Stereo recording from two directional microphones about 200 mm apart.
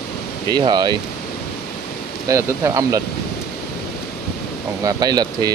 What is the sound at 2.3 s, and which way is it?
Speech, 15° right (ahead or behind).